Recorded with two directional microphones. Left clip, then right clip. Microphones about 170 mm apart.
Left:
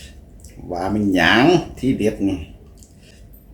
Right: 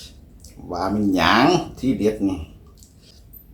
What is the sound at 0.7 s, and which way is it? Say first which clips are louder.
Speech: left 2 dB; 15° left (ahead or behind).